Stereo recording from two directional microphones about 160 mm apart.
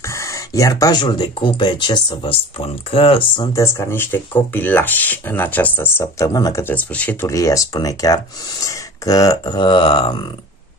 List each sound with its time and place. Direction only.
0.1 s a sound: 20° left (ahead or behind)
1.0 s speech: 30° left (ahead or behind)
3.5 s speech: 15° left (ahead or behind)